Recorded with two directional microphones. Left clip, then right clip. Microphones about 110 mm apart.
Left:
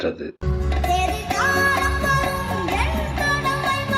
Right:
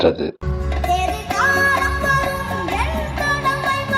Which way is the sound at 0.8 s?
15° right (ahead or behind).